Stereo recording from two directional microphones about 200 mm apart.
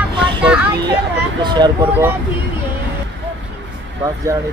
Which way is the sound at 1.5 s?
20° right (ahead or behind).